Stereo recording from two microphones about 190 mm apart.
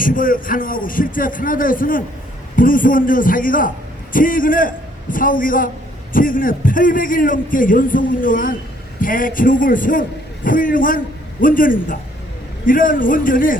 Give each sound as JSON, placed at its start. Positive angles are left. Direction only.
{"t": 0.0, "sound": "a man's voice", "side_deg": 45}